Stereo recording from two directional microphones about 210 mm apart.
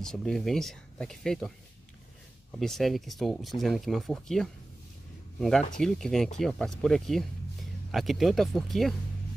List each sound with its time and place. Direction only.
0.0 s speech: centre (ahead or behind)
2.6 s speech: centre (ahead or behind)
5.8 s speech: 5° left (ahead or behind)